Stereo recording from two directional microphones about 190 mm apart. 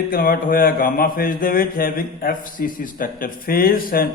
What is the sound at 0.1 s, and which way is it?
Mantra, 50° left (ahead or behind).